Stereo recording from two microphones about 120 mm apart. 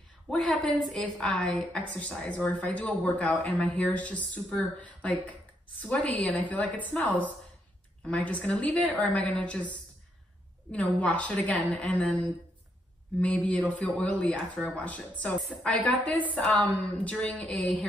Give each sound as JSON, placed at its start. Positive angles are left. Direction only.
{"t": 0.3, "sound": "a woman's voice", "side_deg": 5}
{"t": 13.2, "sound": "a woman's voice", "side_deg": 10}